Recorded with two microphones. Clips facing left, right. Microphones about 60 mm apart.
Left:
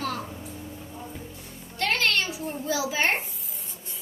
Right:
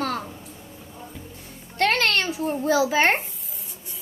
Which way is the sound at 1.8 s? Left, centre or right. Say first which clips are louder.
Right 4 dB; right.